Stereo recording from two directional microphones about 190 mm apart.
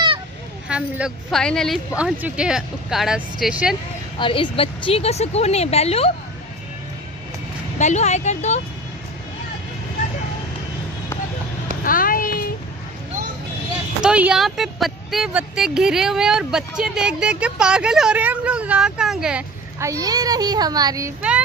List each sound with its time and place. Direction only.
0.7 s speech: 5° right (ahead or behind)
4.2 s a woman's voice: 25° left (ahead or behind)
7.8 s a woman's voice: 35° left (ahead or behind)
11.8 s a sound: 50° left (ahead or behind)
14.0 s speech: 5° right (ahead or behind)
19.8 s a child's voice: 15° right (ahead or behind)